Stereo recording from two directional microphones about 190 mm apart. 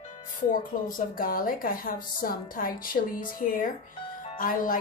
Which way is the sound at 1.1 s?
50° left (ahead or behind).